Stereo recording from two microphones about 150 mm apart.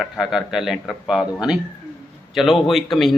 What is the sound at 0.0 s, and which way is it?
A man's voice, centre (ahead or behind).